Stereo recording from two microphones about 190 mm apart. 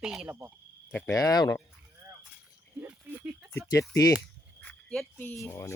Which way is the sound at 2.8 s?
5° right (ahead or behind).